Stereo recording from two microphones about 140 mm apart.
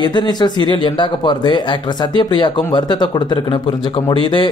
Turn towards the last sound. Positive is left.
turn(degrees=35)  # may be behind; listen again after turning